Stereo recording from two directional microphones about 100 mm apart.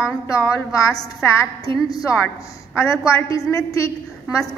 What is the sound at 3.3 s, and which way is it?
Speech, 30° left (ahead or behind).